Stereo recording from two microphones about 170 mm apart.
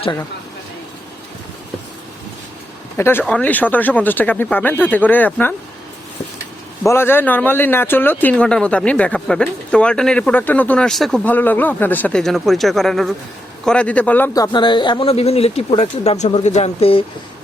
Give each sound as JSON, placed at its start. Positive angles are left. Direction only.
{"t": 3.0, "sound": "a man's voice", "side_deg": 15}
{"t": 6.8, "sound": "a man's voice", "side_deg": 15}
{"t": 14.3, "sound": "speech", "side_deg": 25}